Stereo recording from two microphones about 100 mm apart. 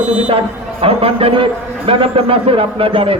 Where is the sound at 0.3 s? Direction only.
70° right (ahead or behind).